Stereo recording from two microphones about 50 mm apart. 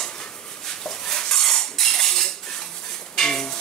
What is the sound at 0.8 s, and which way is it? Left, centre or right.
Cutlery, centre.